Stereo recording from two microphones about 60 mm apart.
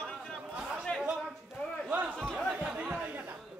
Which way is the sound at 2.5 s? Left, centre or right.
Centre.